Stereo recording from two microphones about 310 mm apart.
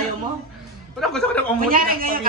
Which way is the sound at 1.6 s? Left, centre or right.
Right.